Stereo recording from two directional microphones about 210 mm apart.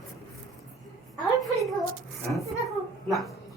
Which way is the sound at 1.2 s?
Centre (ahead or behind).